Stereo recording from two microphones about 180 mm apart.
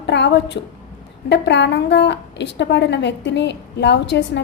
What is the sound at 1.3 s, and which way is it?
A woman's voice, 75° left (ahead or behind).